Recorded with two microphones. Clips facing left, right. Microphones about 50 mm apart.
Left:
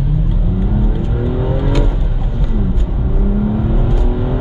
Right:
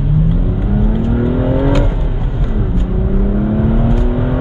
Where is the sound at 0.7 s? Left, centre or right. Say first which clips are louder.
Right 4 dB; right.